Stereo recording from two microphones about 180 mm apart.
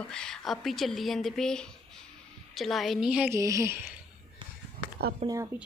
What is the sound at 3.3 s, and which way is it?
Speech, 15° right (ahead or behind).